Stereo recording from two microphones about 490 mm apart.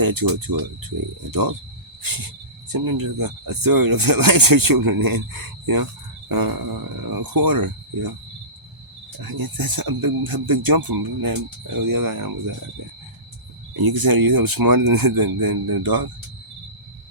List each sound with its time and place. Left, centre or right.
0.0 s speech: right
2.0 s cricket: right
2.7 s speech: right
9.2 s speech: right
13.8 s speech: right